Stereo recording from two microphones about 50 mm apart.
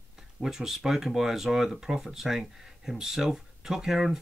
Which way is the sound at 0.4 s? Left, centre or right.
Centre.